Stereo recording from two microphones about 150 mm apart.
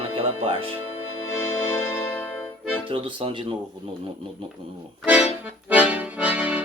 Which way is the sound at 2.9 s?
35° right (ahead or behind).